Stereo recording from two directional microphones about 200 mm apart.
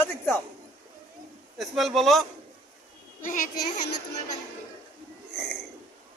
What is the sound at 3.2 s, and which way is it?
Speech, 40° left (ahead or behind).